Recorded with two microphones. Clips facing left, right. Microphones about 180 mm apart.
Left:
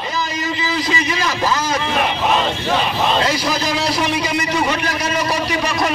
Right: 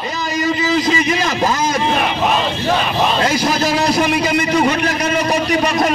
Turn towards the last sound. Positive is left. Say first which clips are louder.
# right 4 dB
turn(degrees=-45)  # may be behind; listen again after turning